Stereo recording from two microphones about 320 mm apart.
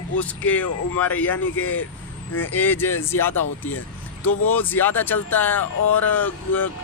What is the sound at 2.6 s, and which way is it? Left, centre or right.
Speech, centre.